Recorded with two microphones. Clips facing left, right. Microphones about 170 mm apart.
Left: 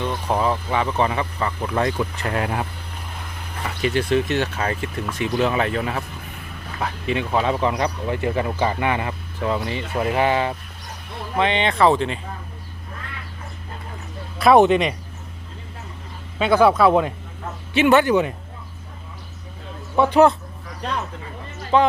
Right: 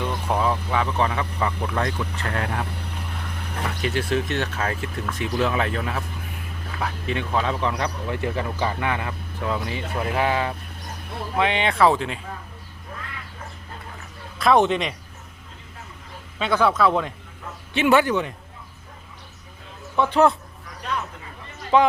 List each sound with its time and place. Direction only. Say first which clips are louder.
0.1 s speech: left 2 dB; 5° left (ahead or behind)
3.8 s speech: left 5 dB; centre (ahead or behind)
14.3 s speech: left 5 dB; 5° left (ahead or behind)
16.4 s speech: left 5 dB; 5° left (ahead or behind)
18.1 s speech: left 6 dB; 10° left (ahead or behind)
20.0 s speech: left 4 dB; 15° left (ahead or behind)
20.8 s speech: left 2 dB; 30° left (ahead or behind)
21.7 s speech: even; 15° right (ahead or behind)